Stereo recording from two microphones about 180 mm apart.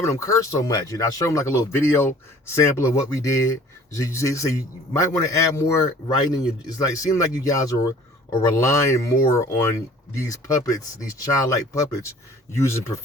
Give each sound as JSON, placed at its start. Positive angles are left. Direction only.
{"t": 0.0, "sound": "a man's voice", "side_deg": 15}